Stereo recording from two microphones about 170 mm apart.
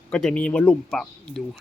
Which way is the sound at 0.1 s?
5° left (ahead or behind).